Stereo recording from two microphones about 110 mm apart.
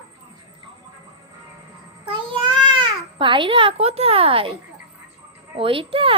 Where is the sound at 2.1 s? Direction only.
50° right (ahead or behind).